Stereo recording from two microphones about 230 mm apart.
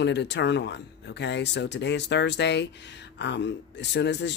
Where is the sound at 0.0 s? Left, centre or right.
Left.